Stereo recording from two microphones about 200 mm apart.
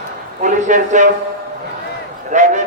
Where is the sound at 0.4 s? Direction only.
35° right (ahead or behind).